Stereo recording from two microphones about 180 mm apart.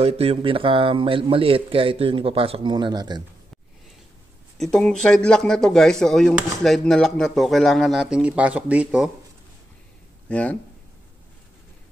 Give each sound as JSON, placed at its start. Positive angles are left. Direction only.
{"t": 0.0, "sound": "a man's voice", "side_deg": -35}
{"t": 4.6, "sound": "speech", "side_deg": 5}
{"t": 10.2, "sound": "speech", "side_deg": 5}